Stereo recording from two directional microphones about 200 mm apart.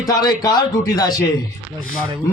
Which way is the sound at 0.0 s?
20° left (ahead or behind).